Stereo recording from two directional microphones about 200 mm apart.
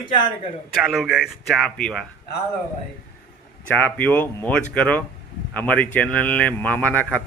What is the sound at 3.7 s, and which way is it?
A man's voice, 10° left (ahead or behind).